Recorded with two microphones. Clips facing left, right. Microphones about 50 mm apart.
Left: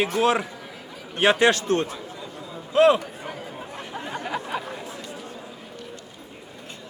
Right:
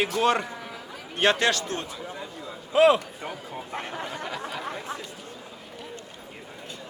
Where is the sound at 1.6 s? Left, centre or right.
Left.